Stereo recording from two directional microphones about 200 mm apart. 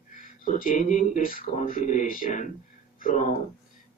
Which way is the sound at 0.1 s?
40° left (ahead or behind).